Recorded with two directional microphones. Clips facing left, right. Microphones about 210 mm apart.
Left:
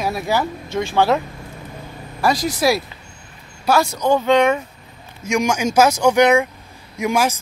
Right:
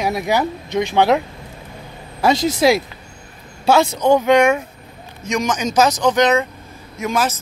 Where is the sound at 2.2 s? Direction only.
25° right (ahead or behind).